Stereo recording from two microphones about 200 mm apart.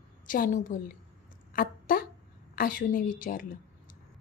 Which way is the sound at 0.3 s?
40° left (ahead or behind).